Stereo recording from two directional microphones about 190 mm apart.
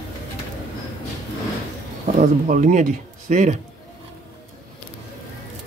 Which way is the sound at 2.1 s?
40° right (ahead or behind).